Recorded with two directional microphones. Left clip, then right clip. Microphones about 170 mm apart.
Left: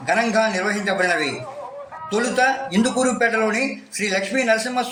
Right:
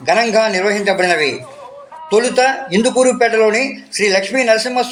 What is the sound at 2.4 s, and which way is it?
Speech, 25° right (ahead or behind).